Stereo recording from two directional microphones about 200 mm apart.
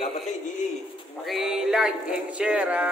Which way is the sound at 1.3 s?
Centre (ahead or behind).